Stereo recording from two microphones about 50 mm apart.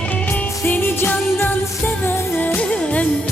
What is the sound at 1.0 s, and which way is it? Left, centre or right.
Music, left.